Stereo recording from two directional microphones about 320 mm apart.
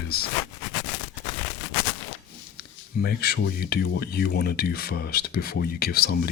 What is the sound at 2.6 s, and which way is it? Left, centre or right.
Speech, left.